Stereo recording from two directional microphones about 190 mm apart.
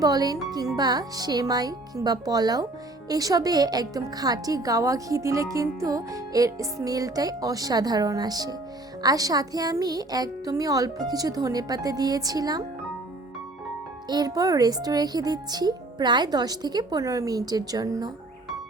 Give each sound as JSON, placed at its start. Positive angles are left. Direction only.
{"t": 0.0, "sound": "a woman's voice", "side_deg": -20}
{"t": 14.1, "sound": "a woman's voice", "side_deg": -20}